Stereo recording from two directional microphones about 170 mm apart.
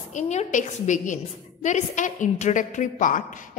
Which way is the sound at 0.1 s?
45° left (ahead or behind).